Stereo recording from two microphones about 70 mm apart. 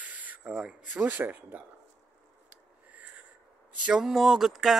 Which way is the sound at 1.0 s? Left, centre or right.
Right.